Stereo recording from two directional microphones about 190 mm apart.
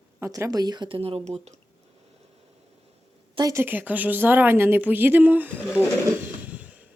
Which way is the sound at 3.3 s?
15° right (ahead or behind).